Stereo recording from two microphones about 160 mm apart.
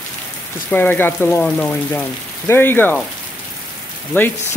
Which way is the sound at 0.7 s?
10° left (ahead or behind).